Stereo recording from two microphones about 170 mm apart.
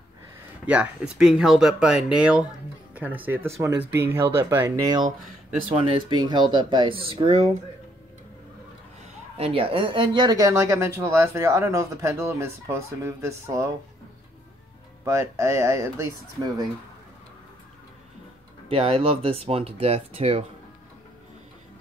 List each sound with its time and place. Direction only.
0.7 s speech: 5° right (ahead or behind); by 7.5 s 35° right (ahead or behind)
9.4 s speech: 35° right (ahead or behind); by 13.7 s 15° right (ahead or behind)
15.0 s speech: 15° right (ahead or behind)
18.7 s speech: 35° right (ahead or behind)